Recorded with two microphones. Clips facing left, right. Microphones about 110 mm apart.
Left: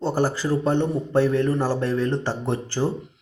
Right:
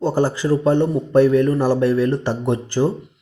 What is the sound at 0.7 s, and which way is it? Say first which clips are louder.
Speech: right 6 dB; 15° left (ahead or behind).